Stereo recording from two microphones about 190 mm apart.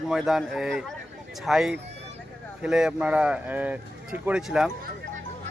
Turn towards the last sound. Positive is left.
turn(degrees=-5)  # may be behind; listen again after turning